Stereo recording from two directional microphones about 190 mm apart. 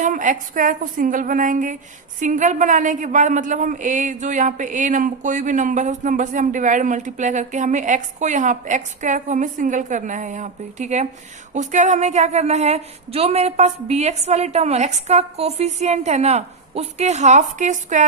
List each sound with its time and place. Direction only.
0.0 s a woman's voice: 40° right (ahead or behind)